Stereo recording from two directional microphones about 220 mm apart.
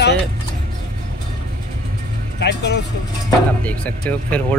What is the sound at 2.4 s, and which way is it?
Speech, 50° left (ahead or behind).